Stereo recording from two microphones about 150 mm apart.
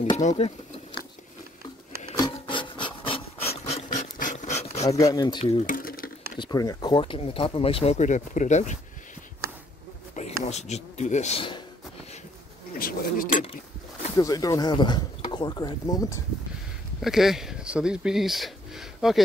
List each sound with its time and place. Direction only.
0.2 s speech: 50° left (ahead or behind)
2.1 s filing: 30° left (ahead or behind); by 4.8 s 50° left (ahead or behind)
4.8 s speech: 20° left (ahead or behind)
5.4 s speech: 45° left (ahead or behind)
5.7 s a sound: 70° left (ahead or behind)
6.4 s speech: 25° left (ahead or behind); by 8.7 s 55° left (ahead or behind)
10.4 s speech: 50° left (ahead or behind)
12.7 s a sound: 75° left (ahead or behind)
13.3 s a sound: 40° left (ahead or behind)
14.1 s speech: 25° left (ahead or behind)
17.0 s speech: centre (ahead or behind)